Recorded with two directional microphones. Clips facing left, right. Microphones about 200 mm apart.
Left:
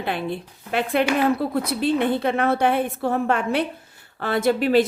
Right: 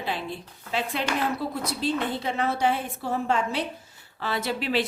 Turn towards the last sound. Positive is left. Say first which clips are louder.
# left 9 dB
turn(degrees=45)  # may be behind; listen again after turning